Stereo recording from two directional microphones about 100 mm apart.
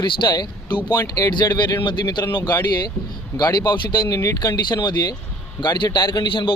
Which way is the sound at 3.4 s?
45° left (ahead or behind).